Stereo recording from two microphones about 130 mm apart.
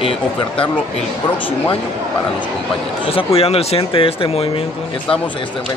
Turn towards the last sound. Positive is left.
turn(degrees=45)  # may be behind; listen again after turning